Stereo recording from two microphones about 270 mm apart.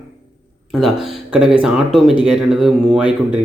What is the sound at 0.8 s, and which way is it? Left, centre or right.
Speech, centre.